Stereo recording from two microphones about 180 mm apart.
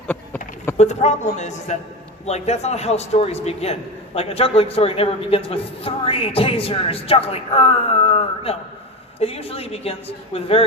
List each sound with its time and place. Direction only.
0.8 s a man's voice: 40° left (ahead or behind)